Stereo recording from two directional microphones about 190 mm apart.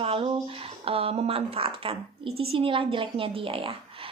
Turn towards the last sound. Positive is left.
turn(degrees=-30)  # may be behind; listen again after turning